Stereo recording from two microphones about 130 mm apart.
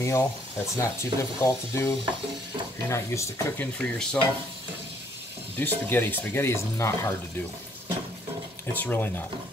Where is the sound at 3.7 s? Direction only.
5° left (ahead or behind).